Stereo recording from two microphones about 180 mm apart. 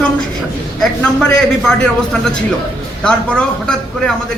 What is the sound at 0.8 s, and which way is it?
A man's voice, 5° left (ahead or behind).